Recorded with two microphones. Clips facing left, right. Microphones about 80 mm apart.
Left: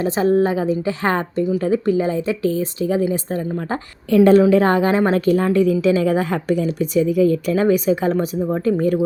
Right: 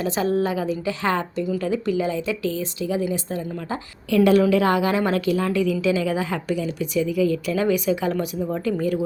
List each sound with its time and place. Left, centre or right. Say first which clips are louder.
0.0 s speech: left 5 dB; left